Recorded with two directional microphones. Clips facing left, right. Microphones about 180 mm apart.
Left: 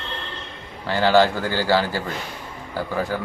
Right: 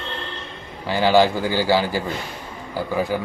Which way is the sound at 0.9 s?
15° right (ahead or behind).